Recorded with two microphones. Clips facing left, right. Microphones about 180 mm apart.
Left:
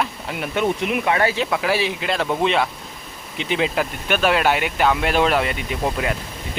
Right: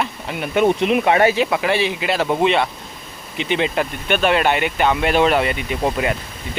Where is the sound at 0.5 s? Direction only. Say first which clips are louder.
Right 6 dB; 25° right (ahead or behind).